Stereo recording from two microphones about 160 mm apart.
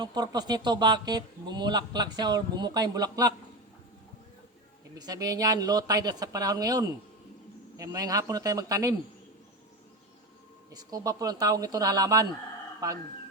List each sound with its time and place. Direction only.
0.0 s speech: 25° right (ahead or behind)
4.9 s speech: 25° right (ahead or behind)
10.7 s speech: 25° right (ahead or behind)